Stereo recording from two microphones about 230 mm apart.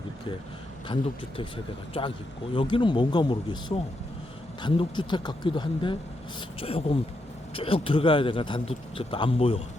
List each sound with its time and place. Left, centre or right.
1.9 s a man's voice: left